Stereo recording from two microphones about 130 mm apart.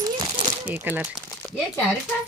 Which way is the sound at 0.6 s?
15° right (ahead or behind).